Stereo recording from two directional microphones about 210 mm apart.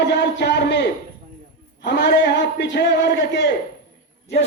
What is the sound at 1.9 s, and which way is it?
Speech, 55° left (ahead or behind).